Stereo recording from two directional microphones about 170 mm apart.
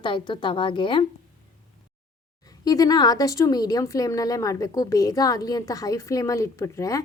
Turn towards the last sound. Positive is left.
turn(degrees=20)  # may be behind; listen again after turning